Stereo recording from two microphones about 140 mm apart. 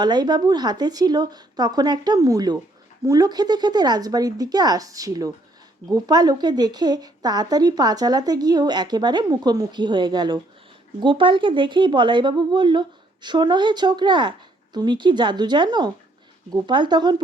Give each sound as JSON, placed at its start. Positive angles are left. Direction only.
{"t": 0.0, "sound": "a woman's voice", "side_deg": -30}